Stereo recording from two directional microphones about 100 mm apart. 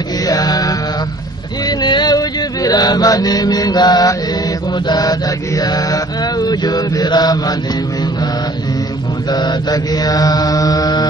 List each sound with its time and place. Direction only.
0.3 s mantra: 40° left (ahead or behind)
1.7 s chant: 45° left (ahead or behind)
4.8 s mantra: 40° left (ahead or behind)
9.3 s mantra: 45° left (ahead or behind)